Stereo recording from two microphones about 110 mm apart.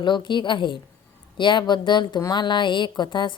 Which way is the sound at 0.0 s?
45° left (ahead or behind).